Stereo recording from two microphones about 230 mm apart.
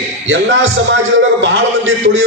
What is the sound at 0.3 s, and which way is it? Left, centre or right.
Speech, right.